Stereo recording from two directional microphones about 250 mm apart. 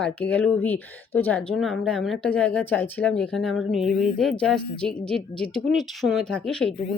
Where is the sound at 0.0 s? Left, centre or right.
Centre.